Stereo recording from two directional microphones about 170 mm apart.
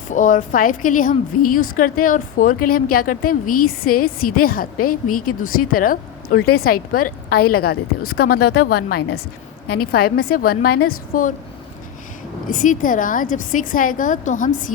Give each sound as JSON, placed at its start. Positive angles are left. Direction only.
{"t": 0.1, "sound": "a woman's voice", "side_deg": 50}
{"t": 12.5, "sound": "a woman's voice", "side_deg": 50}